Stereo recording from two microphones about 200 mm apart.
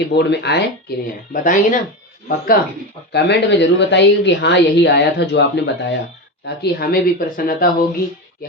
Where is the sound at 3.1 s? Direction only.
60° left (ahead or behind).